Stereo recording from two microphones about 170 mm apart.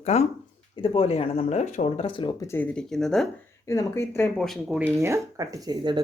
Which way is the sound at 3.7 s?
20° left (ahead or behind).